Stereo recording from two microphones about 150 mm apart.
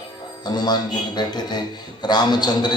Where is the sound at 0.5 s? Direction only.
30° left (ahead or behind).